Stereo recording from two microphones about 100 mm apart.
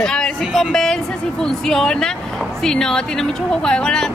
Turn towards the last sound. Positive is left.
turn(degrees=5)  # may be behind; listen again after turning